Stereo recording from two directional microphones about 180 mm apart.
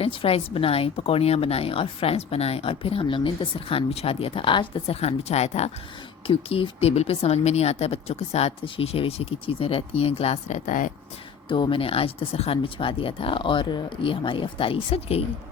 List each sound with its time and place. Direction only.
0.0 s a woman's voice: 30° left (ahead or behind); by 10.9 s 45° left (ahead or behind)
11.4 s speech: 30° left (ahead or behind)